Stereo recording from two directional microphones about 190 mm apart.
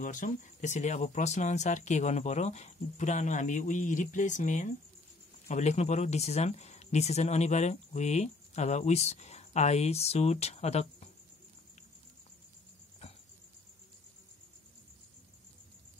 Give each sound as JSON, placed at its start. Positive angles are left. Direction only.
{"t": 0.0, "sound": "speech", "side_deg": 45}